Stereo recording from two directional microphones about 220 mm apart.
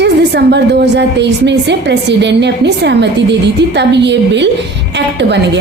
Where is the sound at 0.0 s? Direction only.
50° right (ahead or behind).